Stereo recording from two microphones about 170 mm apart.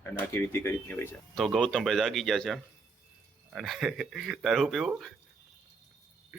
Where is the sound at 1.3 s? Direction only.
Centre (ahead or behind).